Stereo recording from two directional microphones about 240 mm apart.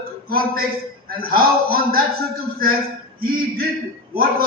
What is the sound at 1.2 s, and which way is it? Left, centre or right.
Speech, right.